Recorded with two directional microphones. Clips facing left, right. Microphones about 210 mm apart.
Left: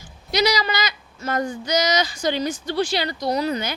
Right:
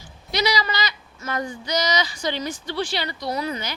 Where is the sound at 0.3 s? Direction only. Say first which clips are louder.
Left 3 dB; 40° left (ahead or behind).